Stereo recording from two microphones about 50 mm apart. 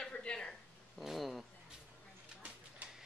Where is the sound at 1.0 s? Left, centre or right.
Centre.